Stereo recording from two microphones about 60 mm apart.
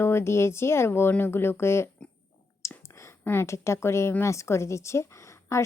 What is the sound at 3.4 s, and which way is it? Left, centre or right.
A woman's voice, left.